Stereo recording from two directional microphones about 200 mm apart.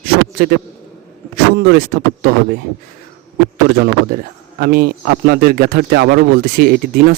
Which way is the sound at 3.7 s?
50° right (ahead or behind).